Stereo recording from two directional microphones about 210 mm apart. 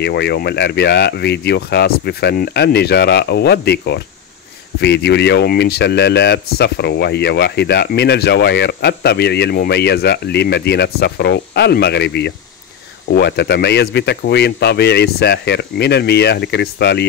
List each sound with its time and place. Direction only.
0.0 s speech: 50° left (ahead or behind)